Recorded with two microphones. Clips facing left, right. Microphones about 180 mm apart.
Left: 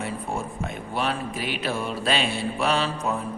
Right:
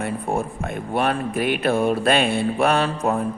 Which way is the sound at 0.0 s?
55° right (ahead or behind).